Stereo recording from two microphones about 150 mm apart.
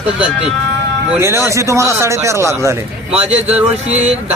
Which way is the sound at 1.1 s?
15° right (ahead or behind).